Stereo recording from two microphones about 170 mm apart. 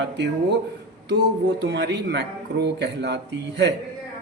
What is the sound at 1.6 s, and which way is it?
Speech, 80° right.